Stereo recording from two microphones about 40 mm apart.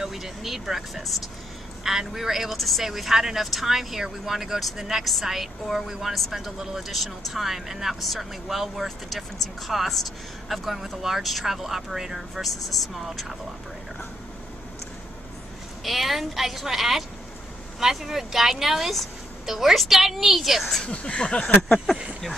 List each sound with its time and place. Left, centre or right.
0.0 s speech: centre
8.8 s speech: centre
15.8 s speech: centre
20.8 s a sound: left